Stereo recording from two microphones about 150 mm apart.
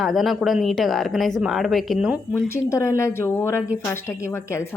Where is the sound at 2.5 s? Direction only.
20° left (ahead or behind).